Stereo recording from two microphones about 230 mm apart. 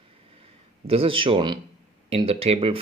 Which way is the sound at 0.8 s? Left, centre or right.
Right.